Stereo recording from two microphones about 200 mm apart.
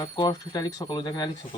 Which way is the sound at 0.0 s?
20° left (ahead or behind).